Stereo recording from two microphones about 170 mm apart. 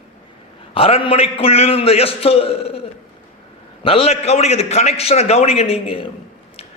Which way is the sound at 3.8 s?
35° left (ahead or behind).